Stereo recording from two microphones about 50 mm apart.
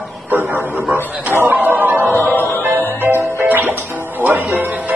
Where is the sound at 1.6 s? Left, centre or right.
Right.